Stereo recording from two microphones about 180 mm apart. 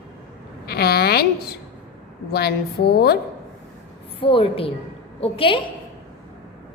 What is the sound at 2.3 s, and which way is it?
Speech, 60° left (ahead or behind).